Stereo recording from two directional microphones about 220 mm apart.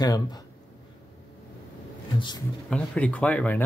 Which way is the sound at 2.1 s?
20° left (ahead or behind).